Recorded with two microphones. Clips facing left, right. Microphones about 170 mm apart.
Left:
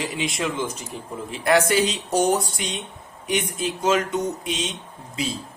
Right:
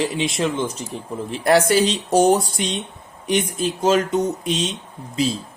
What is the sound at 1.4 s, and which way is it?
Speech, 35° right (ahead or behind).